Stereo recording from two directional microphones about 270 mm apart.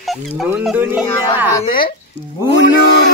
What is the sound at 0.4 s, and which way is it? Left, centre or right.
Speech, centre.